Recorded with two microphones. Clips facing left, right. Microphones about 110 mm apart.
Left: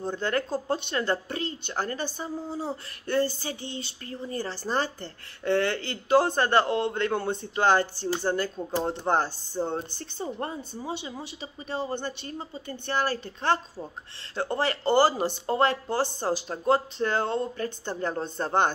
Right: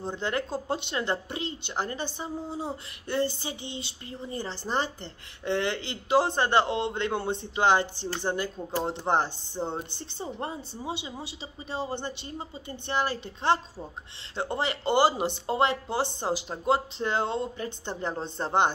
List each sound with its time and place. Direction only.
0.0 s speech: 20° right (ahead or behind)